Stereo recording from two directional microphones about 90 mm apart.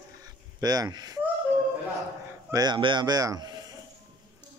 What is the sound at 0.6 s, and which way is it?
Speech, 45° right (ahead or behind).